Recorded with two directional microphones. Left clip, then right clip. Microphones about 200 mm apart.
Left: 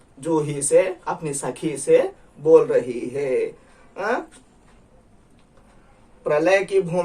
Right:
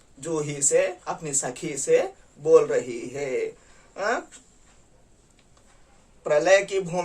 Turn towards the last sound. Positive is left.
turn(degrees=-20)  # may be behind; listen again after turning